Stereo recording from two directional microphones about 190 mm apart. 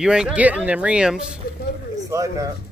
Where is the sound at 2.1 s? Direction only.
15° right (ahead or behind).